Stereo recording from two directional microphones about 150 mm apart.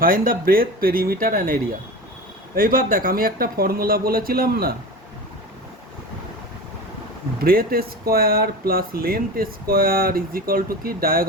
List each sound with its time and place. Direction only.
0.0 s speech: 70° right (ahead or behind)
2.6 s speech: 70° right (ahead or behind); by 4.7 s 85° right
7.3 s speech: 80° right